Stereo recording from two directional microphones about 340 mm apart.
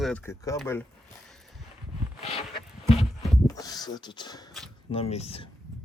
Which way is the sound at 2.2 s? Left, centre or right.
Centre.